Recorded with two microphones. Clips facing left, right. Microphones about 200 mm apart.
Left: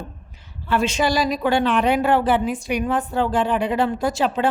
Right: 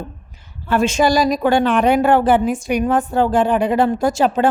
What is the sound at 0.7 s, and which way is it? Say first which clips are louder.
A woman's voice: right 5 dB; 45° right (ahead or behind).